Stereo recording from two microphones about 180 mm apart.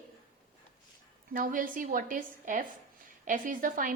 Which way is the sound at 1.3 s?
50° right (ahead or behind).